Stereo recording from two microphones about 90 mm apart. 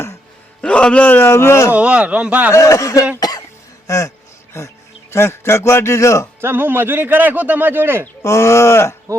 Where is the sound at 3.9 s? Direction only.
35° left (ahead or behind).